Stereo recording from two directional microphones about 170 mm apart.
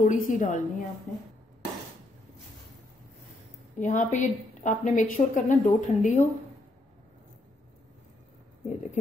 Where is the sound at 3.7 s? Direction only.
45° left (ahead or behind).